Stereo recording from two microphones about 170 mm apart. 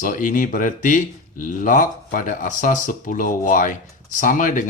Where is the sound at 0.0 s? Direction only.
50° left (ahead or behind).